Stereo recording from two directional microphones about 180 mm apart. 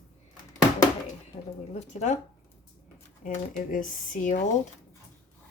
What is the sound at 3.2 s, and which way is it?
Speech, 45° left (ahead or behind).